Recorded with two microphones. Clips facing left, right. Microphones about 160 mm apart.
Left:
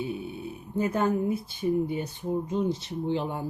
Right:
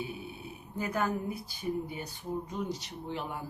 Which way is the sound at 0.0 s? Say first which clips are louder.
Left 7 dB; 25° left (ahead or behind).